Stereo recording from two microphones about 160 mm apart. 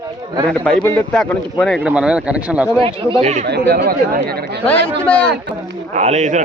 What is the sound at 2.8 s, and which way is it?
Speech, 40° right (ahead or behind).